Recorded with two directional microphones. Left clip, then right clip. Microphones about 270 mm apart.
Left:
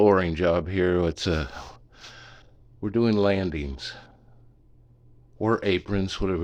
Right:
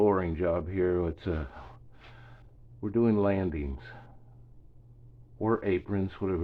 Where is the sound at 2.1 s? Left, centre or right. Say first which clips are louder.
Left 9 dB; left.